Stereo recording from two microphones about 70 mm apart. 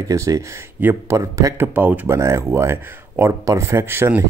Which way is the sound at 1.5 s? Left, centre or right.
Right.